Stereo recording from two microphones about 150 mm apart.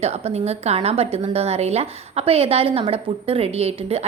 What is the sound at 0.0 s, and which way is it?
A woman's voice, 45° right (ahead or behind).